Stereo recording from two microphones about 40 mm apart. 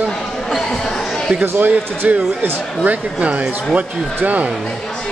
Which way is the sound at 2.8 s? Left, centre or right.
Right.